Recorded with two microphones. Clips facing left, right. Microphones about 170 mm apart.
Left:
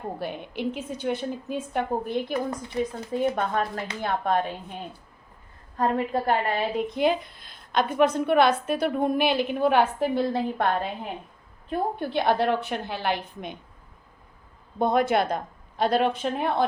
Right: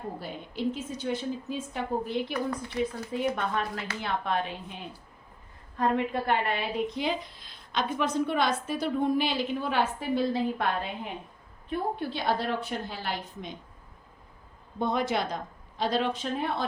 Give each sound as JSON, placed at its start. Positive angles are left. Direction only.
{"t": 0.2, "sound": "a woman's voice", "side_deg": 65}
{"t": 2.5, "sound": "a woman's voice", "side_deg": 20}
{"t": 3.3, "sound": "a woman's voice", "side_deg": 45}
{"t": 11.7, "sound": "a woman's voice", "side_deg": 50}
{"t": 14.8, "sound": "a woman's voice", "side_deg": 50}